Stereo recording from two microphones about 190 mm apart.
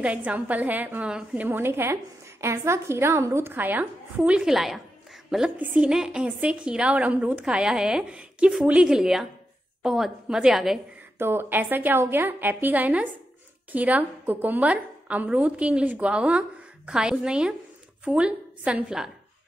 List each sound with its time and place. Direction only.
0.0 s a woman's voice: 5° right (ahead or behind)
11.1 s a woman's voice: 10° right (ahead or behind)